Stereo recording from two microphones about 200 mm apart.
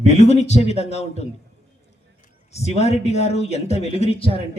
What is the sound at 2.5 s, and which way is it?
Speech, 30° left (ahead or behind).